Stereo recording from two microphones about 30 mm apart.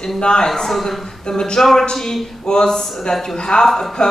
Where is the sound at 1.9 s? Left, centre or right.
Centre.